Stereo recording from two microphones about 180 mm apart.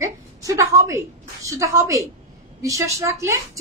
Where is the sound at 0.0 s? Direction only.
20° right (ahead or behind).